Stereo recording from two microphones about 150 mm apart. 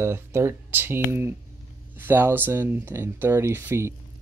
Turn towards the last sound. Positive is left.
turn(degrees=-15)  # may be behind; listen again after turning